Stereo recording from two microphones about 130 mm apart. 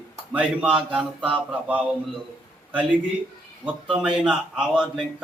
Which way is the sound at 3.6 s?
5° right (ahead or behind).